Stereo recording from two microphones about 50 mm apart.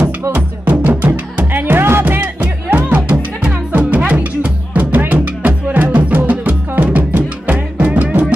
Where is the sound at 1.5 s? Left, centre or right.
Right.